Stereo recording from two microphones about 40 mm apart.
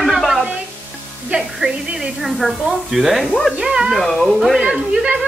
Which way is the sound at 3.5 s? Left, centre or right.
Centre.